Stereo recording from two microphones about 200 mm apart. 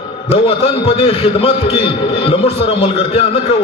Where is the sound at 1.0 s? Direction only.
30° left (ahead or behind).